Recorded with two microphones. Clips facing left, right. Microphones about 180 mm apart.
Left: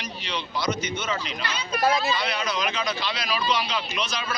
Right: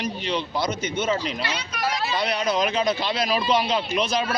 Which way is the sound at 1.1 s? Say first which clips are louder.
Right 5 dB; 40° right (ahead or behind).